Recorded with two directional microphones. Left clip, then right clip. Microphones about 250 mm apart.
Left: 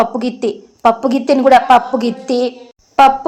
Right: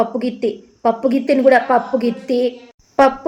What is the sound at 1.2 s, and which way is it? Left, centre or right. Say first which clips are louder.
A woman's voice: left 4 dB; centre.